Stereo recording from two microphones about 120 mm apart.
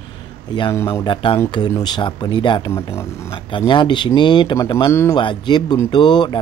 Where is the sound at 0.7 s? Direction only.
20° left (ahead or behind).